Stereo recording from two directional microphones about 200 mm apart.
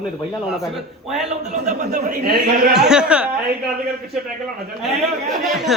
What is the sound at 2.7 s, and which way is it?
Speech, 5° right (ahead or behind).